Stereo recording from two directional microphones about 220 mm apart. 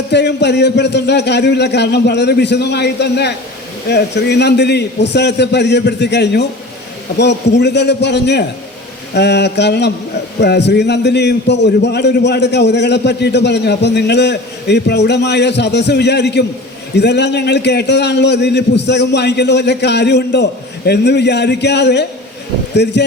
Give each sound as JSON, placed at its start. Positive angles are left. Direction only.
{"t": 0.1, "sound": "a man's voice", "side_deg": 50}